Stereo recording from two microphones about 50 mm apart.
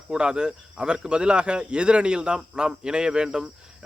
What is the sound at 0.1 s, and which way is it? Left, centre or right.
Speech, centre.